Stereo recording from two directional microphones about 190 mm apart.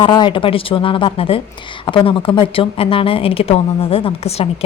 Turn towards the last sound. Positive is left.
turn(degrees=30)  # may be behind; listen again after turning